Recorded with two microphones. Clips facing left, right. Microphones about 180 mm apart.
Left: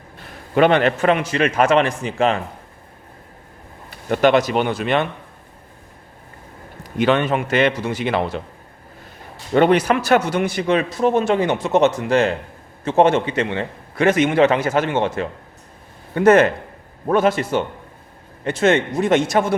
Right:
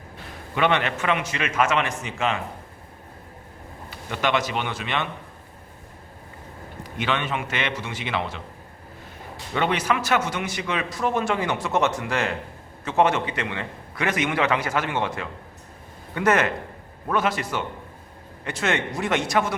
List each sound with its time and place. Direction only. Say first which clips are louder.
0.5 s a man's voice: left 8 dB; 45° left (ahead or behind)
4.1 s a man's voice: left 9 dB; 40° left (ahead or behind)
7.0 s a man's voice: left 9 dB; 45° left (ahead or behind)
9.5 s a man's voice: left 9 dB; 45° left (ahead or behind)
10.0 s a man's voice: left 7 dB; 35° left (ahead or behind)
16.1 s a man's voice: left 8 dB; 35° left (ahead or behind)